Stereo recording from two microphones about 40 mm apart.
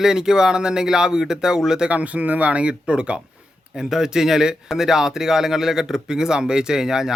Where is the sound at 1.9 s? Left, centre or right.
Right.